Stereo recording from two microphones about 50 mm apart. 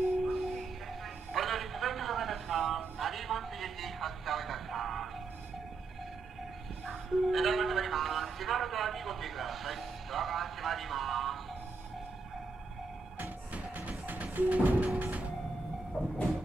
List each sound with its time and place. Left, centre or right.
0.2 s music: centre
1.3 s a sound: centre
6.9 s music: centre
13.5 s music: right
15.0 s sliding door: right
16.0 s vehicle: centre